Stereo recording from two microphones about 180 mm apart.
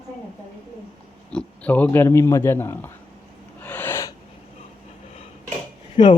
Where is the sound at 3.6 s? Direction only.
10° left (ahead or behind).